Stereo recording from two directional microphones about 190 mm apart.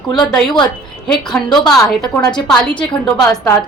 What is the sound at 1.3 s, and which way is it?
A woman's voice, 10° left (ahead or behind).